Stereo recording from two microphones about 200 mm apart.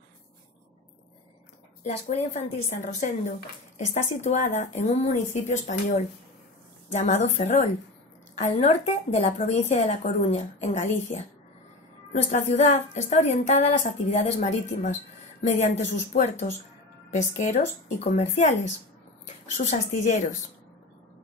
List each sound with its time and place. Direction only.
1.8 s a woman's voice: 35° left (ahead or behind)
12.1 s a woman's voice: 35° left (ahead or behind)
19.5 s a woman's voice: 35° left (ahead or behind)